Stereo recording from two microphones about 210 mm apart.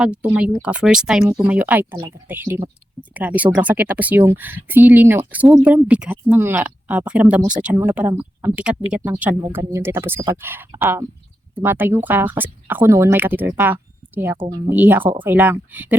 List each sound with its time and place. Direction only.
0.0 s speech: 5° right (ahead or behind)